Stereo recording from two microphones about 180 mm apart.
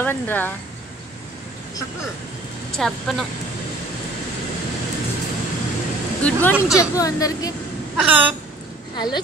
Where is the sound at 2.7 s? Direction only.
Centre (ahead or behind).